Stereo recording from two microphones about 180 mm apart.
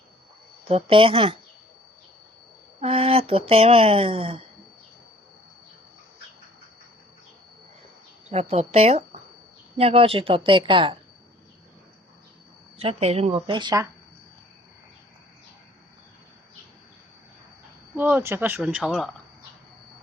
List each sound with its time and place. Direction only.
0.6 s speech: 30° right (ahead or behind)
2.8 s speech: 30° right (ahead or behind)
8.3 s speech: 35° right (ahead or behind)
12.8 s speech: 35° right (ahead or behind)
17.9 s speech: 10° right (ahead or behind)